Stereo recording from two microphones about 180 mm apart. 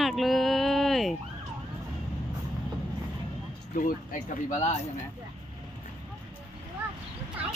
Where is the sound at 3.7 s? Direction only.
50° left (ahead or behind).